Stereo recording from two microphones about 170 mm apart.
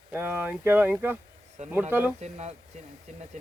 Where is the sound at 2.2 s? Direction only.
40° right (ahead or behind).